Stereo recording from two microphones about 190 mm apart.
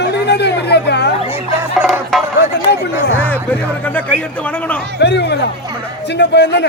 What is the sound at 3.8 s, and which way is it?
Speech, 10° left (ahead or behind).